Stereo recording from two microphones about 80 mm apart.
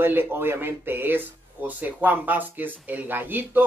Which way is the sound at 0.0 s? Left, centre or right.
Right.